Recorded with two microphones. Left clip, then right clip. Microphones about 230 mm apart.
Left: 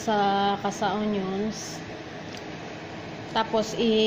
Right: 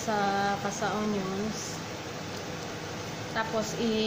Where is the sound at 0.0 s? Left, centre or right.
Centre.